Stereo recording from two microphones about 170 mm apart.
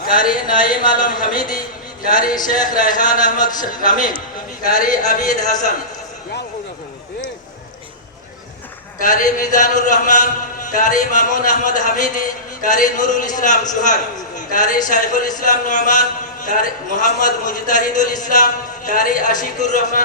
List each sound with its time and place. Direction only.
0.1 s a man's voice: 55° left (ahead or behind)
9.0 s a man's voice: 50° left (ahead or behind)